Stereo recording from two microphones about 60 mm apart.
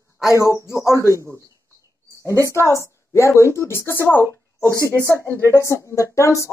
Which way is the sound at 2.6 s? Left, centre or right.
Left.